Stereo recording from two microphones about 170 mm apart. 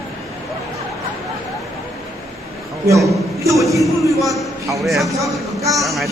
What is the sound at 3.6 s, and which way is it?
A man's voice, centre (ahead or behind).